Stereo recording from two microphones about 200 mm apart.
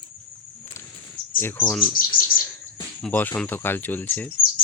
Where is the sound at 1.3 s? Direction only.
10° left (ahead or behind).